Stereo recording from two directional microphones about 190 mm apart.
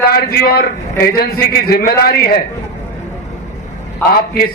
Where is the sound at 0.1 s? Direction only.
50° left (ahead or behind).